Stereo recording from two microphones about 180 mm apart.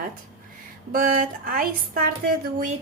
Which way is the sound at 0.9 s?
50° right (ahead or behind).